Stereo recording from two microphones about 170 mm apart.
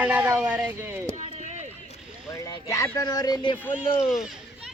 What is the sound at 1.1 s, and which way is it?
Run, 45° right (ahead or behind).